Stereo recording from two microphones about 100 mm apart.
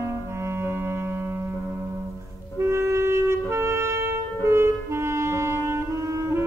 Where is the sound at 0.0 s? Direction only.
25° right (ahead or behind).